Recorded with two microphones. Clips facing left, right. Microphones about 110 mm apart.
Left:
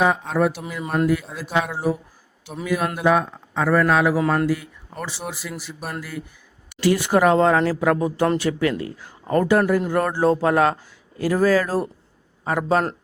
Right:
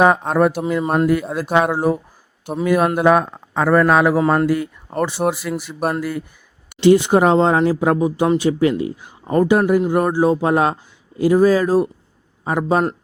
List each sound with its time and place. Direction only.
0.0 s speech: 55° right (ahead or behind)
0.8 s speech: 40° right (ahead or behind)
1.1 s a man's voice: 55° right (ahead or behind)
6.7 s speech: 25° right (ahead or behind)